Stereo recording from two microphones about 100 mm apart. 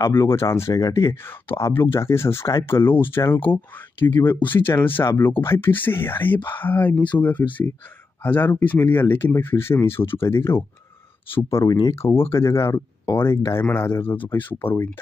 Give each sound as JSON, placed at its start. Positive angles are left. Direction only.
{"t": 0.0, "sound": "speech", "side_deg": 25}
{"t": 1.6, "sound": "speech", "side_deg": 20}
{"t": 11.2, "sound": "speech", "side_deg": 60}
{"t": 11.9, "sound": "speech", "side_deg": 25}